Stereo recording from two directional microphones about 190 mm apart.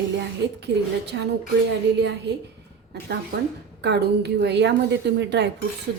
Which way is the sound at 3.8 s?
65° right (ahead or behind).